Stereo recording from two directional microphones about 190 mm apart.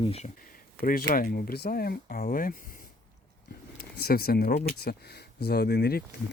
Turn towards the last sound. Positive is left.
turn(degrees=60)  # may be behind; listen again after turning